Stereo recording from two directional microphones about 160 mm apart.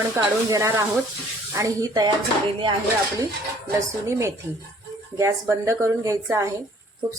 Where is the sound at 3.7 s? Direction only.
20° right (ahead or behind).